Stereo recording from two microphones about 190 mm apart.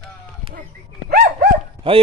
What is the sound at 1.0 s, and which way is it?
Dog, 50° right (ahead or behind).